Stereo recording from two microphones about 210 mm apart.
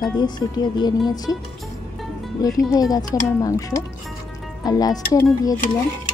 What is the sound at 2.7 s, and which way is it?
Speech, 15° left (ahead or behind).